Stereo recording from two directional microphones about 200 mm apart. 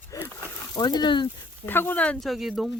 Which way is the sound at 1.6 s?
10° left (ahead or behind).